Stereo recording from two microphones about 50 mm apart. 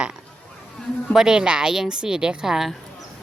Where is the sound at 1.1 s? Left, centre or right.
Centre.